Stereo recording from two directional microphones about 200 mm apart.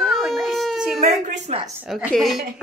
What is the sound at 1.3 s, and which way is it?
Speech, 30° right (ahead or behind).